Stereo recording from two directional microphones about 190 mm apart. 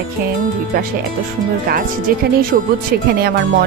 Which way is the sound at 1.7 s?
50° right (ahead or behind).